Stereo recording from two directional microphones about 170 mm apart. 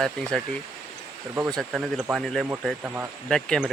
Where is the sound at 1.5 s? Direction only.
Centre (ahead or behind).